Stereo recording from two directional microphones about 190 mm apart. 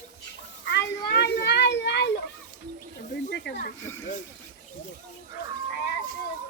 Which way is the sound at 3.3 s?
60° left (ahead or behind).